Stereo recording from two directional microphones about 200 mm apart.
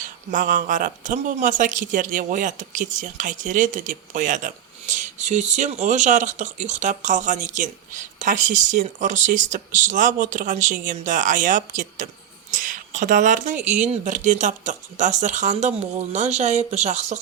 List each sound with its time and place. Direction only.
0.0 s a woman's voice: 40° right (ahead or behind)